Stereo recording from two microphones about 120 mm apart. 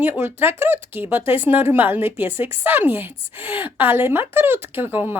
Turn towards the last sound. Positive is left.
turn(degrees=-15)  # may be behind; listen again after turning